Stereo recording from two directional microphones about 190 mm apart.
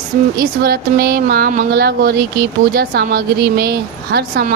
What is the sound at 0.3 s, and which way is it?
A woman's voice, 55° right (ahead or behind).